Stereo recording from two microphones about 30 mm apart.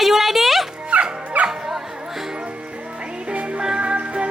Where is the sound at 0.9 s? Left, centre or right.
Right.